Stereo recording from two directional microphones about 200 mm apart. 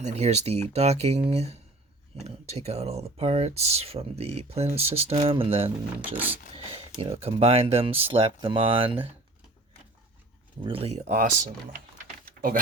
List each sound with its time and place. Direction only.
0.0 s speech: 35° right (ahead or behind)
6.0 s speech: 10° right (ahead or behind)
7.0 s speech: 30° right (ahead or behind)
10.6 s speech: 25° right (ahead or behind)
12.2 s a sound: 45° right (ahead or behind)